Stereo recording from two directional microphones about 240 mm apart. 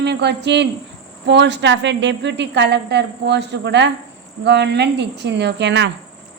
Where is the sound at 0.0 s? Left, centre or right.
Right.